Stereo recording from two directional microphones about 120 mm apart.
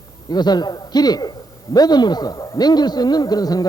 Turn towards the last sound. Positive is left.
turn(degrees=30)  # may be behind; listen again after turning